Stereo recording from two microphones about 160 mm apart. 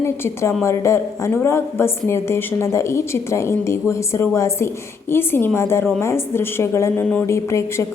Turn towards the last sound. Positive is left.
turn(degrees=20)  # may be behind; listen again after turning